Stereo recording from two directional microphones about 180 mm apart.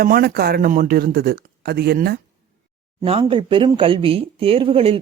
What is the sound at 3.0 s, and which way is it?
Speech, 30° right (ahead or behind).